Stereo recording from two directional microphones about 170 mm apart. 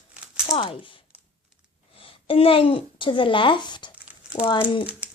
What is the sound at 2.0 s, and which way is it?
A child's voice, 30° left (ahead or behind).